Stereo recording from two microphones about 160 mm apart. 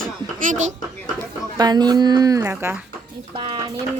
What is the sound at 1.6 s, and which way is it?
A woman's voice, 25° right (ahead or behind).